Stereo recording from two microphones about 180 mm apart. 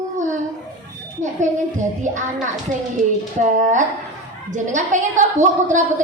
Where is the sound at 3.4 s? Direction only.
45° right (ahead or behind).